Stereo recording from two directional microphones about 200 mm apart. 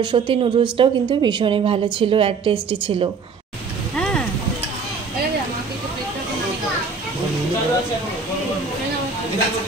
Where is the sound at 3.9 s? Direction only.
5° left (ahead or behind).